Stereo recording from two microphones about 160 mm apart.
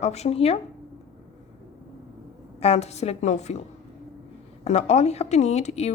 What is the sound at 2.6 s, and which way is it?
A woman's voice, 40° left (ahead or behind).